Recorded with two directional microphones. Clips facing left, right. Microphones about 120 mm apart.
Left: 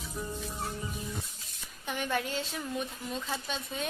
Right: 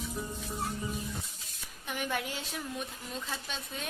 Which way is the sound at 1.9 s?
5° right (ahead or behind).